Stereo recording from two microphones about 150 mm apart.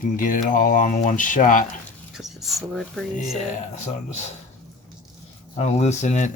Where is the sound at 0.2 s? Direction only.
60° left (ahead or behind).